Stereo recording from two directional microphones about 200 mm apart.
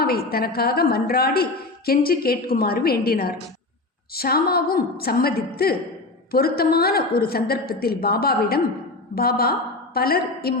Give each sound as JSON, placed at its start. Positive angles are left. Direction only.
{"t": 0.0, "sound": "a woman's voice", "side_deg": 50}